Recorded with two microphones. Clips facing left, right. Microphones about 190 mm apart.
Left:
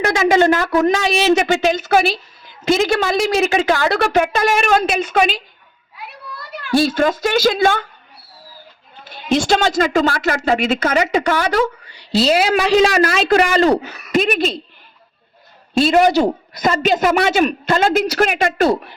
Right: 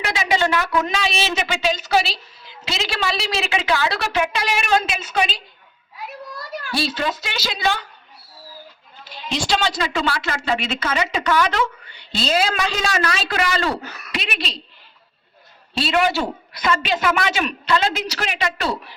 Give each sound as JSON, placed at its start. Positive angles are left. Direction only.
{"t": 0.0, "sound": "speech", "side_deg": 45}
{"t": 6.7, "sound": "speech", "side_deg": 50}
{"t": 9.0, "sound": "speech", "side_deg": 50}
{"t": 15.7, "sound": "speech", "side_deg": 45}